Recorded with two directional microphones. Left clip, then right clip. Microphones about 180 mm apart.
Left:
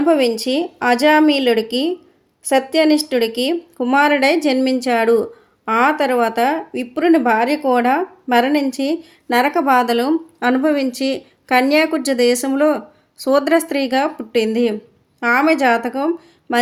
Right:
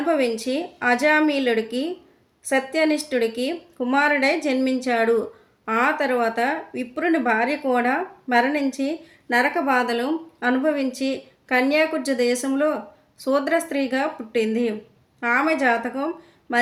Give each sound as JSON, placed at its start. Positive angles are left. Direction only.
{"t": 0.0, "sound": "a woman's voice", "side_deg": 35}